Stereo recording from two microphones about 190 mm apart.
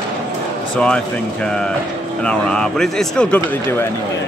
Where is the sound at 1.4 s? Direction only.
5° left (ahead or behind).